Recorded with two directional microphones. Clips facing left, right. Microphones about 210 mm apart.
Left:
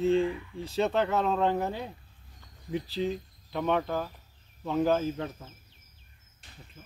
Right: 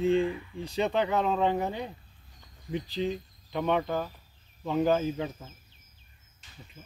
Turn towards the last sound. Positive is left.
turn(degrees=0)  # may be behind; listen again after turning